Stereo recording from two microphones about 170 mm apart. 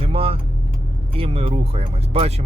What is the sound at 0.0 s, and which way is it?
Vehicle, 35° right (ahead or behind).